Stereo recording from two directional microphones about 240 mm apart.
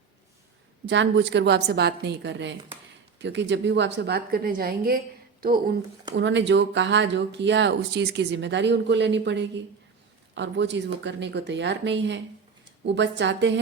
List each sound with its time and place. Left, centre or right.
0.9 s a woman's voice: right
6.1 s speech: right